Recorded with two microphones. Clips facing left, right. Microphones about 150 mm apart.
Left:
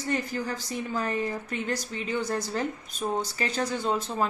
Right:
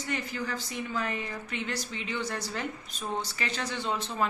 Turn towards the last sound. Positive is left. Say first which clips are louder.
# left 3 dB
turn(degrees=40)  # may be behind; listen again after turning